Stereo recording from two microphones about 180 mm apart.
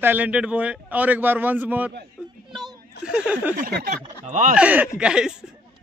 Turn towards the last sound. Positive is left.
turn(degrees=-5)  # may be behind; listen again after turning